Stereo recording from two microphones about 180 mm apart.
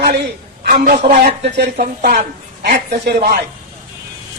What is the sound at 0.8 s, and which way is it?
A woman's voice, 40° right (ahead or behind).